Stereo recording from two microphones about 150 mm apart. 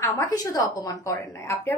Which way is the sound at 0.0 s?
20° left (ahead or behind).